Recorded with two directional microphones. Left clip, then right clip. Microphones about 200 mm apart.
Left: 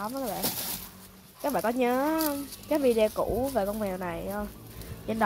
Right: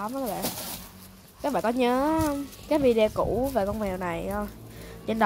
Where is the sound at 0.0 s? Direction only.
5° right (ahead or behind).